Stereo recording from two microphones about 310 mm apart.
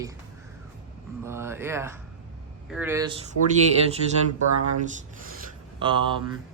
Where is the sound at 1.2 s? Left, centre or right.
Centre.